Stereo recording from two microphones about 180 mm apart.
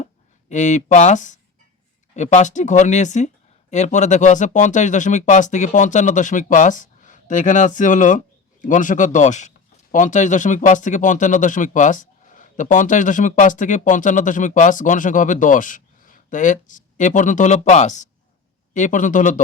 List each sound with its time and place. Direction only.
0.0 s speech: 40° left (ahead or behind)